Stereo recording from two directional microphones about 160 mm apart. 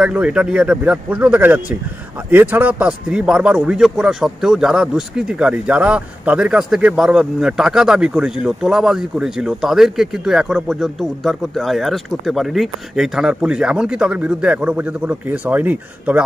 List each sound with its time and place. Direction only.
0.0 s a man's voice: 5° right (ahead or behind)